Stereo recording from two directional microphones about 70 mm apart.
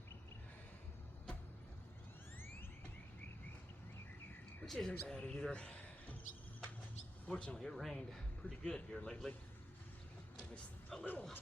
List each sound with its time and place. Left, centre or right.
4.6 s speech: centre
7.3 s speech: centre
10.3 s vehicle: centre
11.0 s speech: left